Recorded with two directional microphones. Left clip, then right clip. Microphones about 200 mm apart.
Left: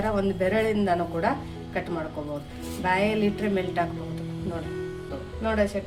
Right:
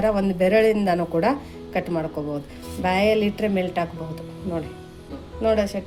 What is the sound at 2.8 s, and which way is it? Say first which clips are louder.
A woman's voice: right 4 dB; 40° right (ahead or behind).